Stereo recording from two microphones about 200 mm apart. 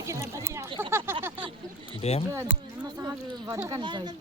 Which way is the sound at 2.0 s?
30° left (ahead or behind).